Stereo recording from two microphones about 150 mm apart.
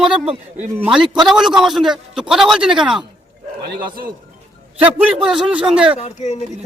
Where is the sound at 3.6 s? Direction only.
90° right.